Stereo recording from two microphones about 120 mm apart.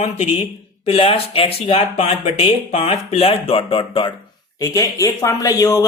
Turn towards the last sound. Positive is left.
turn(degrees=30)  # may be behind; listen again after turning